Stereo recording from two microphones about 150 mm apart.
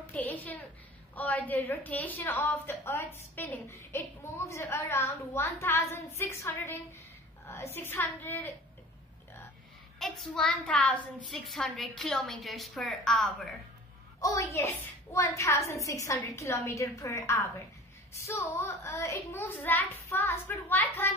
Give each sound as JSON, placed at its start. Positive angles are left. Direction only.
{"t": 0.1, "sound": "a sound", "side_deg": 10}
{"t": 1.1, "sound": "a woman's voice", "side_deg": 10}
{"t": 9.9, "sound": "a woman's voice", "side_deg": 0}
{"t": 14.2, "sound": "a woman's voice", "side_deg": 20}